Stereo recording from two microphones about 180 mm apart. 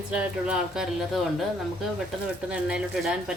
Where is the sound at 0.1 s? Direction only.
5° right (ahead or behind).